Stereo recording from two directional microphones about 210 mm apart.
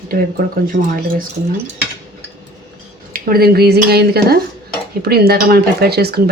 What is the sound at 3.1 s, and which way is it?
Speech, 45° right (ahead or behind).